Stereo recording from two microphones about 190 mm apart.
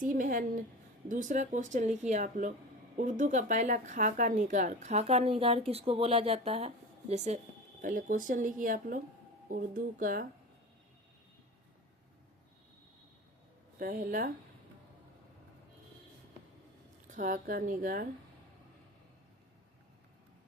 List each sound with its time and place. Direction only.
0.0 s speech: 45° right (ahead or behind)
13.7 s speech: 45° right (ahead or behind)
17.1 s speech: 40° right (ahead or behind)